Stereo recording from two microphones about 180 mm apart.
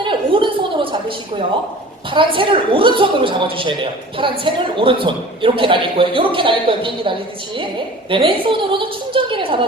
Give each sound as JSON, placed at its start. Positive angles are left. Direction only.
{"t": 0.0, "sound": "a sound", "side_deg": -25}
{"t": 2.0, "sound": "a woman's voice", "side_deg": -30}
{"t": 8.1, "sound": "a woman's voice", "side_deg": -30}